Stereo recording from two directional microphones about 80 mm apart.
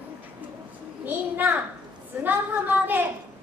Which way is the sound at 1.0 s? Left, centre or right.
Right.